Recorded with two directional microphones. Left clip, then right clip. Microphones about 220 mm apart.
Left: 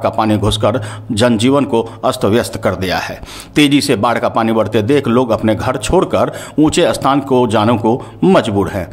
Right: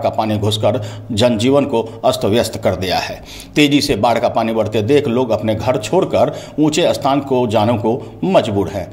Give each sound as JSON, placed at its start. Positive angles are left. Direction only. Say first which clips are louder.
{"t": 0.0, "sound": "speech", "louder": "left 3 dB", "side_deg": 20}